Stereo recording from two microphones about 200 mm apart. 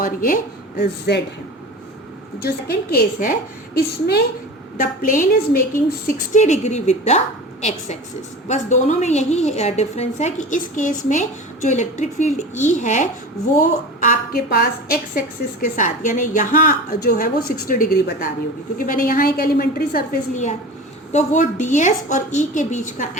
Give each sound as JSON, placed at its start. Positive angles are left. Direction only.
{"t": 0.0, "sound": "a woman's voice", "side_deg": 45}
{"t": 0.8, "sound": "speech", "side_deg": 55}
{"t": 2.4, "sound": "a woman's voice", "side_deg": 50}